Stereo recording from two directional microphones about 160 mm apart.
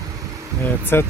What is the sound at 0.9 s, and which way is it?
Speech, 15° left (ahead or behind).